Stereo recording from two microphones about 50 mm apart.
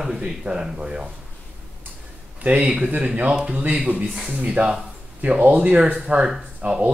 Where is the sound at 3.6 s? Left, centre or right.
Right.